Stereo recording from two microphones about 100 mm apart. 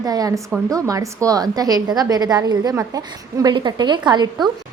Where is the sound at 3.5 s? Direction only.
50° right (ahead or behind).